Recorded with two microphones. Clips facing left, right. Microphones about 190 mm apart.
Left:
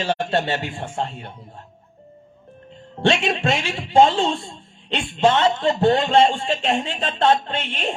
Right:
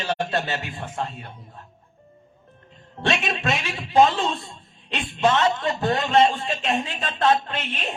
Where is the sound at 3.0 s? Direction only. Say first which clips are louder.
Left 5 dB; 30° left (ahead or behind).